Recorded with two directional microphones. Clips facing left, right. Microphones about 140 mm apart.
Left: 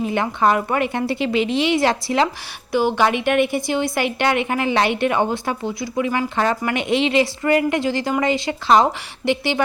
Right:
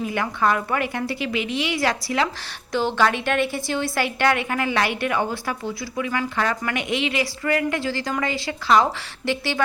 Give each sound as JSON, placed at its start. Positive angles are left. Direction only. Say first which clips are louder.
{"t": 0.0, "sound": "a woman's voice", "louder": "left 4 dB", "side_deg": 25}
{"t": 2.7, "sound": "a woman's voice", "louder": "left 3 dB", "side_deg": 15}